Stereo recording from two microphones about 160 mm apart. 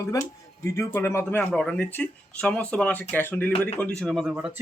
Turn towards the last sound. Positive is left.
turn(degrees=-10)  # may be behind; listen again after turning